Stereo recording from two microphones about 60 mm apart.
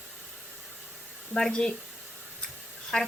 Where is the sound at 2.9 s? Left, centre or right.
Centre.